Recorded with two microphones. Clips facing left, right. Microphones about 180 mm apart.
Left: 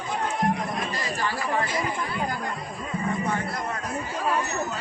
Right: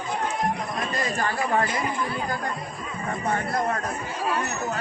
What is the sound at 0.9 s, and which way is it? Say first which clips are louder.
Speech: right 3 dB; 50° right (ahead or behind).